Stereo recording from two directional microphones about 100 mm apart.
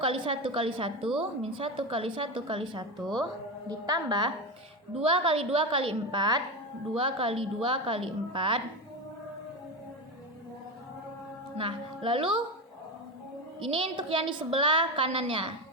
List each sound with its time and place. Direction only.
0.0 s a woman's voice: 60° right (ahead or behind)
3.7 s a woman's voice: 40° right (ahead or behind)
5.0 s a woman's voice: 65° right (ahead or behind); by 6.4 s 50° right (ahead or behind)
6.9 s a woman's voice: 65° right (ahead or behind)
11.5 s a woman's voice: 60° right (ahead or behind)
13.7 s a woman's voice: 65° right (ahead or behind)